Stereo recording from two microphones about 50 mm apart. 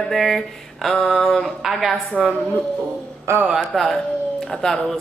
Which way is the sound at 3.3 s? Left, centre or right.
Right.